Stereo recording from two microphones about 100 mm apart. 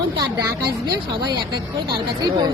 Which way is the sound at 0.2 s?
45° right (ahead or behind).